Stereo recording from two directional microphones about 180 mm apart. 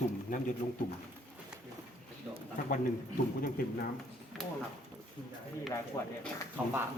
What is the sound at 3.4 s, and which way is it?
Speech, 55° left (ahead or behind).